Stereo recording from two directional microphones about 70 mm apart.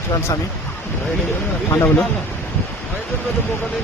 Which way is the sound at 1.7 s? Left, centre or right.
Left.